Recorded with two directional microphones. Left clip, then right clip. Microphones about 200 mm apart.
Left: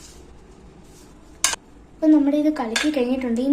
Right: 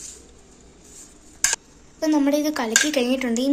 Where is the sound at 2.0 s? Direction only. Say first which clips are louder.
Left 3 dB; 45° right (ahead or behind).